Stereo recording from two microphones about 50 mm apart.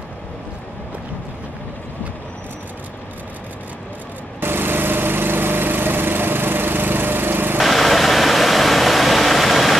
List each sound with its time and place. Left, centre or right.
4.4 s lawn mower: right
7.5 s vehicle: centre